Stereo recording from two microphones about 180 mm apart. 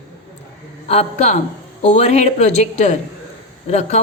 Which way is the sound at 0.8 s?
35° left (ahead or behind).